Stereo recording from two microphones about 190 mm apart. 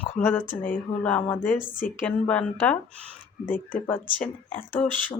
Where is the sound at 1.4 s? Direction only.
45° left (ahead or behind).